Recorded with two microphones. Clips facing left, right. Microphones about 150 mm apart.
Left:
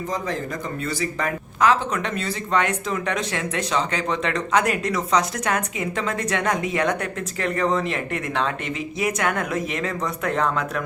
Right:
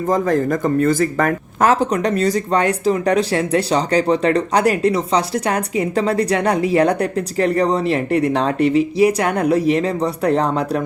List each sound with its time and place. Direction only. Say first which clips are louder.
0.1 s speech: right 13 dB; 50° right (ahead or behind)